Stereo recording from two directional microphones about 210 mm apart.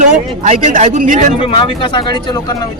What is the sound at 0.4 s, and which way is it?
Speech, 35° right (ahead or behind).